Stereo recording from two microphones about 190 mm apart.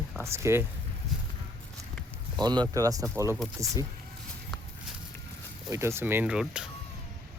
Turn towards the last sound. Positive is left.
turn(degrees=-5)  # may be behind; listen again after turning